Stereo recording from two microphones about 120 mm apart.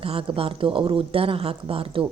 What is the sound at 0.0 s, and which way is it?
A woman's voice, 50° right (ahead or behind).